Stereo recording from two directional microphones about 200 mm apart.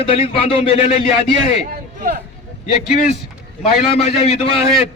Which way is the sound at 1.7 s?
45° right (ahead or behind).